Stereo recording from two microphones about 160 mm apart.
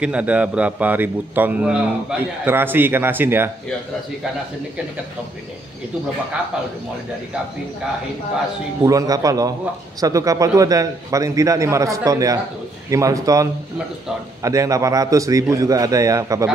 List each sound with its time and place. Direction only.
0.0 s a man's voice: 10° right (ahead or behind)
8.8 s a man's voice: 20° right (ahead or behind)